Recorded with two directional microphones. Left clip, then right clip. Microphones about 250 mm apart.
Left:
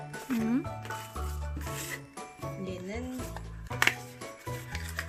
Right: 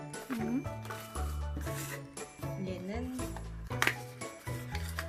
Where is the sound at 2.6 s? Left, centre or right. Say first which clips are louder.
Left 1 dB; centre.